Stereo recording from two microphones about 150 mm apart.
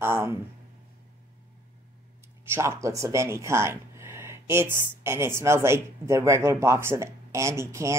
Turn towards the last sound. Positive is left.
turn(degrees=-20)  # may be behind; listen again after turning